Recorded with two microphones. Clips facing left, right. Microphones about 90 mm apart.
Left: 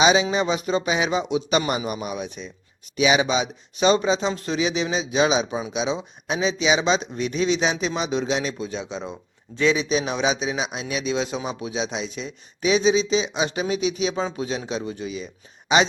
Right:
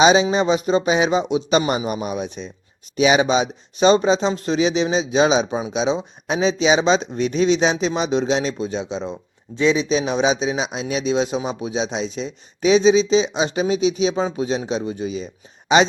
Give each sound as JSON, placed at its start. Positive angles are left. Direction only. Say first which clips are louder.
{"t": 0.0, "sound": "speech", "louder": "right 4 dB", "side_deg": -30}
{"t": 2.9, "sound": "speech", "louder": "right 4 dB", "side_deg": -40}